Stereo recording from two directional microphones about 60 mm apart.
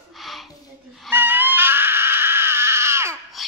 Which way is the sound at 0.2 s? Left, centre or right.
Centre.